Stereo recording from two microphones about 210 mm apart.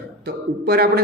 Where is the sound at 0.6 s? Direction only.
50° right (ahead or behind).